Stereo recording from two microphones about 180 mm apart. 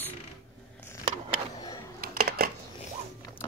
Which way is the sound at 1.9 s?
60° right (ahead or behind).